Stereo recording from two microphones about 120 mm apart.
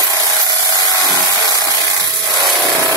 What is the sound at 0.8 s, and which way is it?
Tools, 30° right (ahead or behind).